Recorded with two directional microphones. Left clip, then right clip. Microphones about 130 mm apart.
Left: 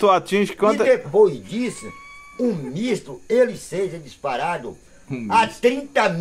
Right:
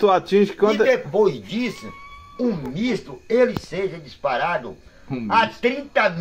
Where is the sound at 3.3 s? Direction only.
40° left (ahead or behind).